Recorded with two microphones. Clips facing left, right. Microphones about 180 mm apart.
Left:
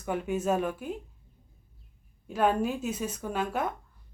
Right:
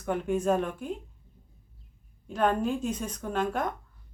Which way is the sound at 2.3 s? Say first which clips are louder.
Even; 5° left (ahead or behind).